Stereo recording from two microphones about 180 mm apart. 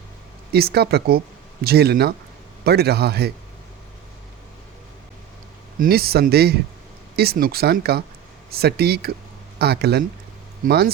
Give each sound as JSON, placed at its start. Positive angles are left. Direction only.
{"t": 0.5, "sound": "speech", "side_deg": -60}
{"t": 5.8, "sound": "speech", "side_deg": -60}